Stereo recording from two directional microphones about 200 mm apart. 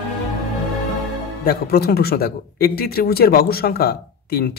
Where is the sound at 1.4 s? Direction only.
50° left (ahead or behind).